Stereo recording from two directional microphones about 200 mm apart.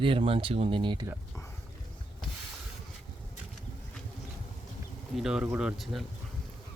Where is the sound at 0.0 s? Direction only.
25° right (ahead or behind).